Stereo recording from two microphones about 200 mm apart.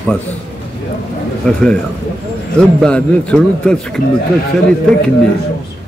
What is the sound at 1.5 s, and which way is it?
A man's voice, 5° left (ahead or behind).